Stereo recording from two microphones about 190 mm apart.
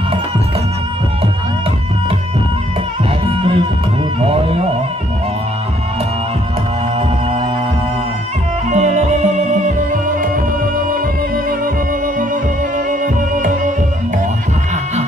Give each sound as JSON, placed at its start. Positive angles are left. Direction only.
{"t": 3.3, "sound": "music", "side_deg": -30}
{"t": 8.6, "sound": "music", "side_deg": -35}
{"t": 12.7, "sound": "music", "side_deg": -45}